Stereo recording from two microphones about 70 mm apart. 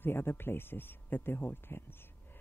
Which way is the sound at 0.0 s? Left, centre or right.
Left.